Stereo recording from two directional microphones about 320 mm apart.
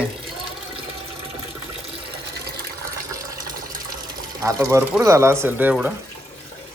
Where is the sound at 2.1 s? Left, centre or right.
Right.